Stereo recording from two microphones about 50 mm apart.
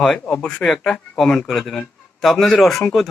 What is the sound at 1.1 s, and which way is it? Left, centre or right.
Speech, centre.